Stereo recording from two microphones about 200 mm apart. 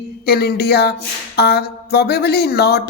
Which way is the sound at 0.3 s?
50° left (ahead or behind).